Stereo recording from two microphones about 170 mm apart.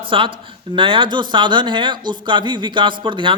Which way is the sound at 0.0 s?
30° right (ahead or behind).